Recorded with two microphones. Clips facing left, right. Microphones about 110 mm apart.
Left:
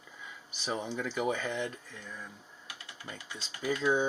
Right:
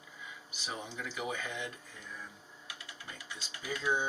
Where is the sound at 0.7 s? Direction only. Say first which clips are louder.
Left 7 dB; 50° left (ahead or behind).